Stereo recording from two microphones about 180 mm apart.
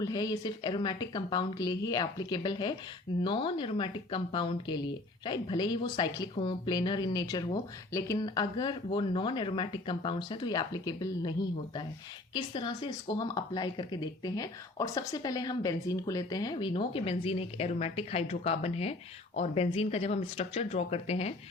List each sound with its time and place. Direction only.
0.0 s speech: 20° left (ahead or behind)